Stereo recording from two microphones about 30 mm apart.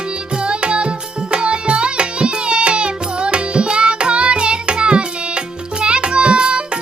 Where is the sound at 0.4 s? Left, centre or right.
Right.